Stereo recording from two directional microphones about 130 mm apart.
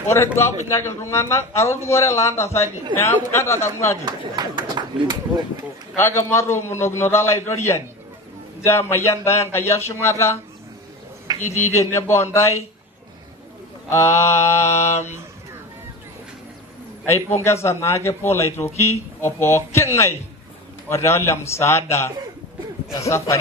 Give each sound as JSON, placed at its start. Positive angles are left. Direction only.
{"t": 0.1, "sound": "a man's voice", "side_deg": 20}
{"t": 4.0, "sound": "speech", "side_deg": -35}
{"t": 5.9, "sound": "a man's voice", "side_deg": 20}
{"t": 11.5, "sound": "a man's voice", "side_deg": 20}
{"t": 13.8, "sound": "a man's voice", "side_deg": 20}
{"t": 17.4, "sound": "a man's voice", "side_deg": 20}